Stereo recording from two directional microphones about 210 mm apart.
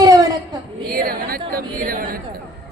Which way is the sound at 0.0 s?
15° right (ahead or behind).